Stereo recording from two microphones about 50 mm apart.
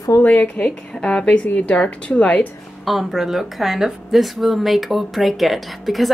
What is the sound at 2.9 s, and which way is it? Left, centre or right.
Speech, centre.